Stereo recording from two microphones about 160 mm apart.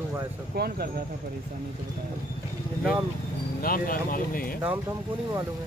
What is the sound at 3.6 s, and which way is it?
Speech, 65° left (ahead or behind).